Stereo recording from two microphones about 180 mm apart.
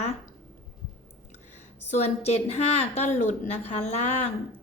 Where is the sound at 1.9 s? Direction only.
35° left (ahead or behind).